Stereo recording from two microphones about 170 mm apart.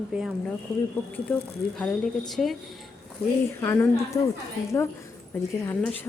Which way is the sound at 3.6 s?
15° left (ahead or behind).